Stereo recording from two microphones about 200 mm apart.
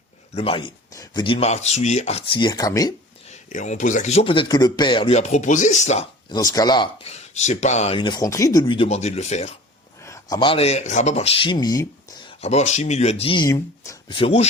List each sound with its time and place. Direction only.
0.3 s speech: 25° left (ahead or behind)
3.2 s speech: 35° left (ahead or behind)
6.2 s speech: 20° left (ahead or behind)
10.0 s speech: 15° left (ahead or behind)
12.4 s speech: 35° left (ahead or behind)